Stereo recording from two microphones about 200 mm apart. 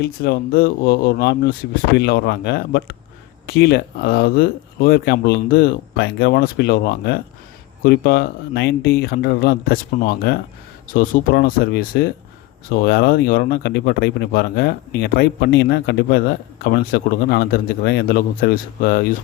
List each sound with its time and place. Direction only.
0.0 s speech: 55° left (ahead or behind)